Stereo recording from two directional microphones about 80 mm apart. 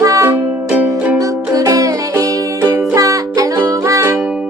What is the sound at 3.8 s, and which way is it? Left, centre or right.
Music, right.